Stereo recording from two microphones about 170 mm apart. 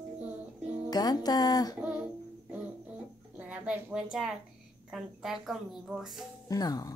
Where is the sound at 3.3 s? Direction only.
5° right (ahead or behind).